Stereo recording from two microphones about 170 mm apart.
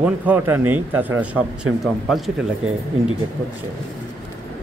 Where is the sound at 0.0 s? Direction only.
10° right (ahead or behind).